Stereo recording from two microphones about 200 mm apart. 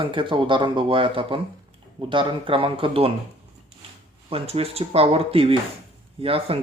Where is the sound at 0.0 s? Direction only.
25° right (ahead or behind).